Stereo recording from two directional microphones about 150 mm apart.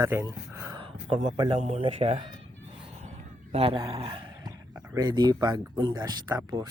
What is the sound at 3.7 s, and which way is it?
Speech, 25° right (ahead or behind).